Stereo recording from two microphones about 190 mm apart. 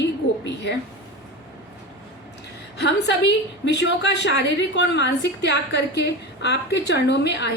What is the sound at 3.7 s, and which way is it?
A woman's voice, 65° left (ahead or behind).